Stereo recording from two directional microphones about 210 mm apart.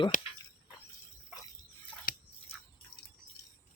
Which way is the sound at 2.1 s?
45° left (ahead or behind).